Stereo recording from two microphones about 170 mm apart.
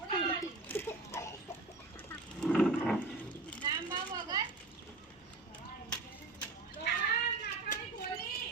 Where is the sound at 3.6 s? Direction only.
25° right (ahead or behind).